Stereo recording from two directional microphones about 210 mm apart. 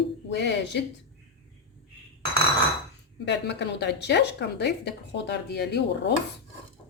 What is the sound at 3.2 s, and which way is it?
Speech, 55° left (ahead or behind).